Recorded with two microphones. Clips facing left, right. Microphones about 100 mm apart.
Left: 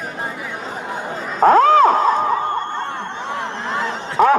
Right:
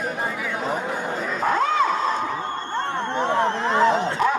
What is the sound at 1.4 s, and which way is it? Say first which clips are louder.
Crowd: left 11 dB; 50° left (ahead or behind).